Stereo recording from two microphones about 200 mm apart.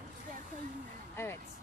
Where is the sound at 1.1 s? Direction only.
10° left (ahead or behind).